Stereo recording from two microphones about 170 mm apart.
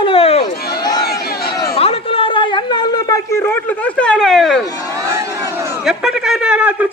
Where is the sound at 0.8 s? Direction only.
25° left (ahead or behind).